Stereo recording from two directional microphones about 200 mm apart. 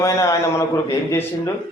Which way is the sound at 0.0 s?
15° left (ahead or behind).